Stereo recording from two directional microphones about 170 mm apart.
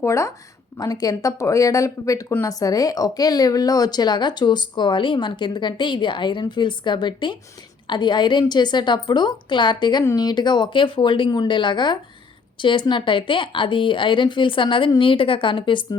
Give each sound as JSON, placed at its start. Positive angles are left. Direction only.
{"t": 0.0, "sound": "speech", "side_deg": 15}